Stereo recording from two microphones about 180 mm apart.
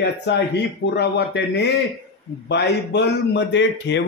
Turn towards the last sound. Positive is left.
turn(degrees=75)  # may be behind; listen again after turning